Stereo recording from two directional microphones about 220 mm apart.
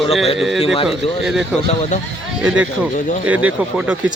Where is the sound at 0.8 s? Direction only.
Centre (ahead or behind).